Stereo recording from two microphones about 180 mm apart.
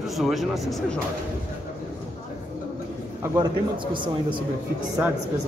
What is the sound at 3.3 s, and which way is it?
A man's voice, 25° right (ahead or behind).